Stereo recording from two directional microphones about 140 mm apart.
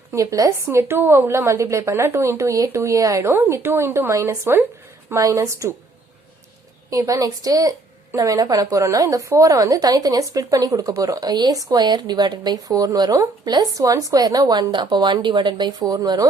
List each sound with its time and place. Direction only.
0.1 s speech: 25° right (ahead or behind)
6.9 s speech: 25° right (ahead or behind)